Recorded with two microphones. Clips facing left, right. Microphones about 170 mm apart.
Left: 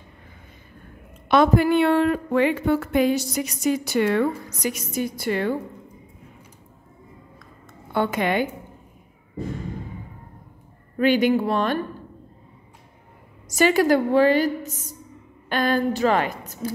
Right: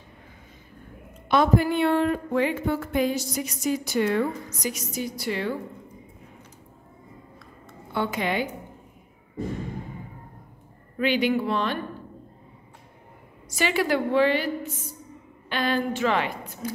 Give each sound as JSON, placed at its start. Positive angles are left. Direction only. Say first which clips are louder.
{"t": 1.3, "sound": "a woman's voice", "louder": "left 4 dB", "side_deg": 75}
{"t": 7.9, "sound": "a woman's voice", "louder": "left 4 dB", "side_deg": 50}
{"t": 11.0, "sound": "a woman's voice", "louder": "left 4 dB", "side_deg": 45}
{"t": 13.5, "sound": "a woman's voice", "louder": "left 6 dB", "side_deg": 45}